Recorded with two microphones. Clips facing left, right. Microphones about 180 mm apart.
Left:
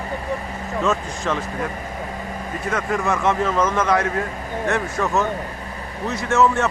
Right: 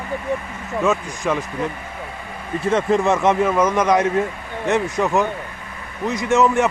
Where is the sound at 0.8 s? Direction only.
10° right (ahead or behind).